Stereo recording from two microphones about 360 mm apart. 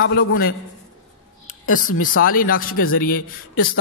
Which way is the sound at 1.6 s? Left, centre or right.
Left.